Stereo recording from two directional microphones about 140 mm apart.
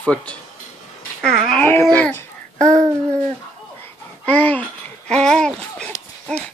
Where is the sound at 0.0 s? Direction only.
10° left (ahead or behind).